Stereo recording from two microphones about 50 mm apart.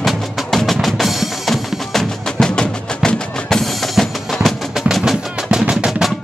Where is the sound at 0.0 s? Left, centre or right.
Centre.